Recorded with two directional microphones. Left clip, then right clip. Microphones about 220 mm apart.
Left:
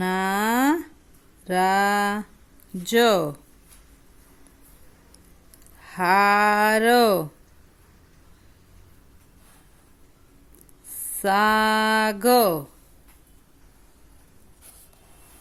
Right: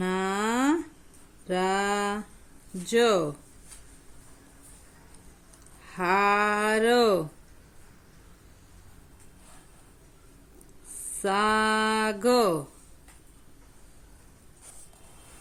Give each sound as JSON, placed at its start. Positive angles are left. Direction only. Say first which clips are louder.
{"t": 0.0, "sound": "a sound", "louder": "left 5 dB", "side_deg": 30}
{"t": 2.8, "sound": "speech", "louder": "left 4 dB", "side_deg": 30}
{"t": 5.8, "sound": "speech", "louder": "left 5 dB", "side_deg": 30}
{"t": 11.2, "sound": "speech", "louder": "left 5 dB", "side_deg": 30}